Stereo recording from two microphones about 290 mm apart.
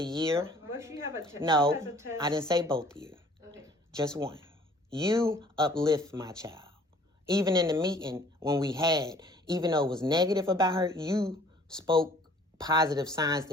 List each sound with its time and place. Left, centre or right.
0.0 s a man's voice: centre
2.6 s speech: centre
3.9 s a man's voice: centre